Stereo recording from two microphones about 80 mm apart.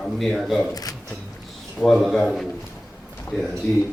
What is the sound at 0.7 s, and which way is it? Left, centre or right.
Speech, left.